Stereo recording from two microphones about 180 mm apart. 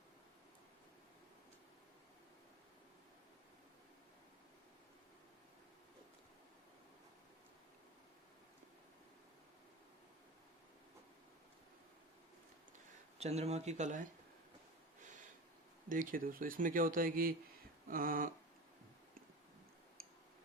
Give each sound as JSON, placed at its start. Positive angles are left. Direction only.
{"t": 13.1, "sound": "speech", "side_deg": -35}
{"t": 15.9, "sound": "speech", "side_deg": -50}